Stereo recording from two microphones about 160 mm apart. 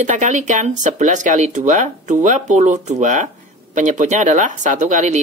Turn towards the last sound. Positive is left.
turn(degrees=-50)  # may be behind; listen again after turning